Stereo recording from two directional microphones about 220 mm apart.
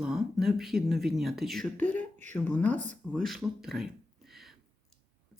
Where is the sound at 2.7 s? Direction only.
35° right (ahead or behind).